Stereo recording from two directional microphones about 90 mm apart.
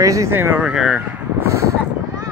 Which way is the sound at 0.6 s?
5° right (ahead or behind).